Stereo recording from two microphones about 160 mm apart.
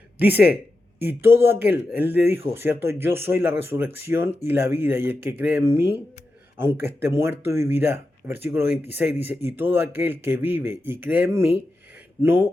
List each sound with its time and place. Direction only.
0.2 s speech: 10° right (ahead or behind)
0.4 s a sound: 75° left (ahead or behind)
1.0 s speech: 15° right (ahead or behind)